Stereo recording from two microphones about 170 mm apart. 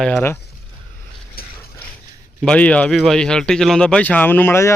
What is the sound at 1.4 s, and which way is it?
Ratchet, 60° left (ahead or behind).